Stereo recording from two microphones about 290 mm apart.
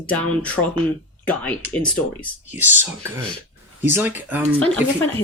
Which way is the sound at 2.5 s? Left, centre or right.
Centre.